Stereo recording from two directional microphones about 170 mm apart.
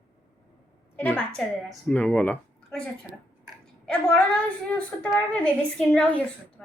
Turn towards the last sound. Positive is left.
turn(degrees=5)  # may be behind; listen again after turning